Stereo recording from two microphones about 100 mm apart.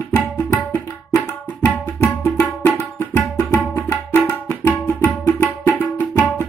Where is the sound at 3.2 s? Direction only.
30° left (ahead or behind).